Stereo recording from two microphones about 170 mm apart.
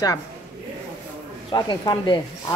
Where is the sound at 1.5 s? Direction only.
25° left (ahead or behind).